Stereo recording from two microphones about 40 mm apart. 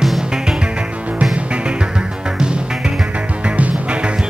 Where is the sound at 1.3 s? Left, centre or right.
Right.